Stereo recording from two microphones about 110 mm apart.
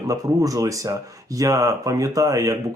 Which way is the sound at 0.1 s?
30° right (ahead or behind).